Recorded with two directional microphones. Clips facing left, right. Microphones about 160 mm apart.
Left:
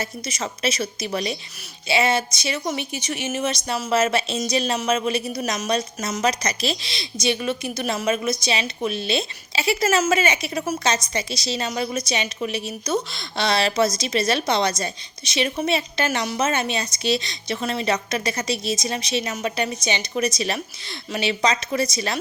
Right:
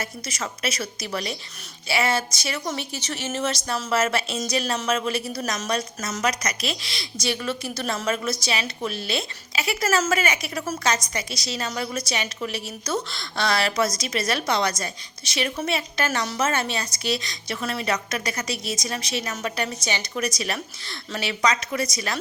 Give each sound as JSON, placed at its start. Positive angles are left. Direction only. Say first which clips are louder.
{"t": 0.0, "sound": "a woman's voice", "louder": "left 3 dB", "side_deg": 20}